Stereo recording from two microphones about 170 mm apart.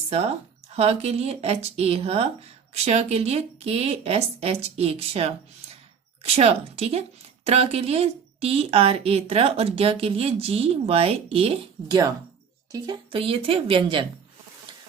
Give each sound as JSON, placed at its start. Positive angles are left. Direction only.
{"t": 0.8, "sound": "a woman's voice", "side_deg": -40}
{"t": 12.7, "sound": "a woman's voice", "side_deg": -25}